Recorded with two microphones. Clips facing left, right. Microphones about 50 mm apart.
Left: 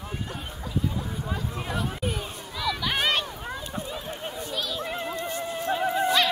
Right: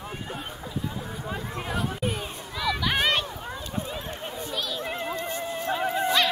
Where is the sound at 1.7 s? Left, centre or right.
Centre.